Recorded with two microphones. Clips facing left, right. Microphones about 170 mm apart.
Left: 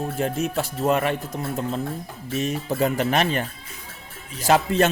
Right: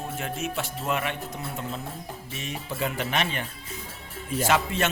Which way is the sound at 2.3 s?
40° left (ahead or behind).